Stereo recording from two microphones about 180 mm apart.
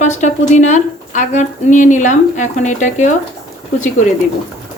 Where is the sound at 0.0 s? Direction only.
40° left (ahead or behind).